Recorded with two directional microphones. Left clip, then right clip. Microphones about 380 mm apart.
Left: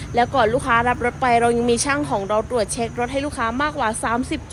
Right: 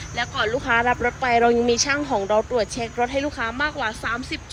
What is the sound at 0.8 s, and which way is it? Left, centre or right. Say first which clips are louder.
Speech: left 2 dB; left.